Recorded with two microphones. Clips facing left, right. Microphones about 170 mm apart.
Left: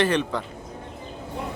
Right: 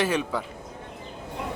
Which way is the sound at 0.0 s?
5° right (ahead or behind).